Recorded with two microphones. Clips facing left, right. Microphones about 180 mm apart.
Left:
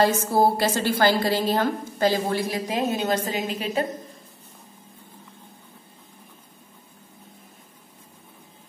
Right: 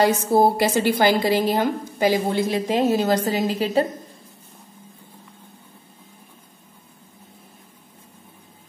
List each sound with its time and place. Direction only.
0.0 s a woman's voice: 15° right (ahead or behind); by 3.8 s 35° right (ahead or behind)